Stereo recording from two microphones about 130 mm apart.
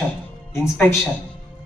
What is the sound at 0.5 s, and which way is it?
Speech, 20° left (ahead or behind).